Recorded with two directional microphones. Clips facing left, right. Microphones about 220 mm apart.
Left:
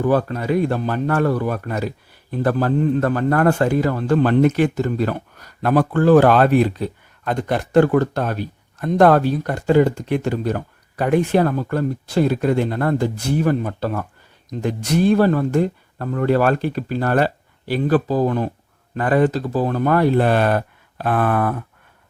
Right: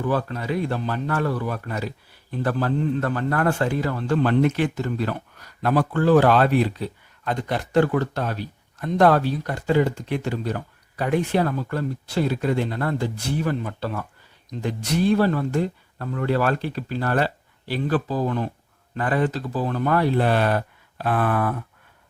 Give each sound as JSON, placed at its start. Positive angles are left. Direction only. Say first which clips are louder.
{"t": 0.0, "sound": "a man's voice", "louder": "left 6 dB", "side_deg": 45}